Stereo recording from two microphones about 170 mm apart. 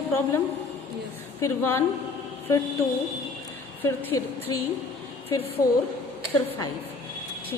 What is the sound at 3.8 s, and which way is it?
Speech, 10° left (ahead or behind).